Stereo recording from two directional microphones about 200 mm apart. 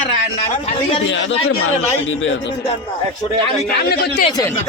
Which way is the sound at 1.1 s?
70° left (ahead or behind).